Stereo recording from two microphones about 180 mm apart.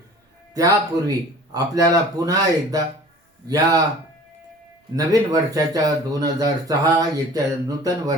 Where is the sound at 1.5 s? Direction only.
20° right (ahead or behind).